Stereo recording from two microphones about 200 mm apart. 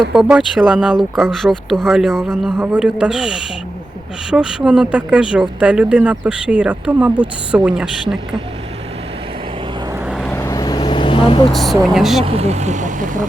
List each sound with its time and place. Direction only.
0.1 s speech: centre (ahead or behind)
10.1 s vehicle: centre (ahead or behind)
10.3 s vehicle: 15° left (ahead or behind)
11.5 s speech: centre (ahead or behind)
12.2 s speech: 30° right (ahead or behind)